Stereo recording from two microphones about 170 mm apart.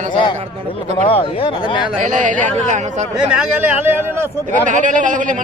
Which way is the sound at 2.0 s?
50° right (ahead or behind).